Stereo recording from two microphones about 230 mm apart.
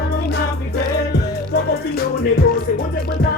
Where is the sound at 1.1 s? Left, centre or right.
Left.